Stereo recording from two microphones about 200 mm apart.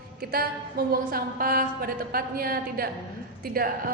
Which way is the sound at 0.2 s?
50° right (ahead or behind).